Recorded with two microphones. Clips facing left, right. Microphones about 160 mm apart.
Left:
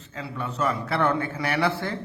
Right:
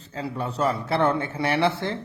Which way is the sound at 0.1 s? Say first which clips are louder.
Right 3 dB; 35° right (ahead or behind).